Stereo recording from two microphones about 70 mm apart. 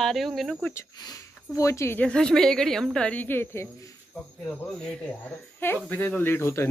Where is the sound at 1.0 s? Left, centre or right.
Left.